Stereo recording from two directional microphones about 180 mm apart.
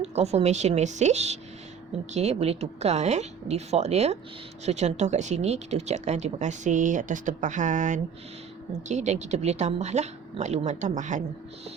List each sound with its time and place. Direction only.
0.0 s speech: 35° right (ahead or behind)